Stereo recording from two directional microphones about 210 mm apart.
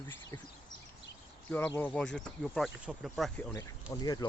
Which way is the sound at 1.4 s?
10° left (ahead or behind).